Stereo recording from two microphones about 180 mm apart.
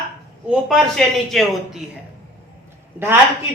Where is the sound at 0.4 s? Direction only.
5° right (ahead or behind).